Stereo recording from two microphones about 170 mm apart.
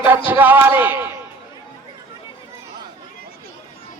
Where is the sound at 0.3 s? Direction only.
10° right (ahead or behind).